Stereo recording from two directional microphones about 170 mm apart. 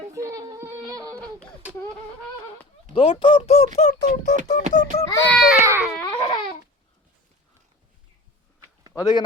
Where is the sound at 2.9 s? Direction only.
30° left (ahead or behind).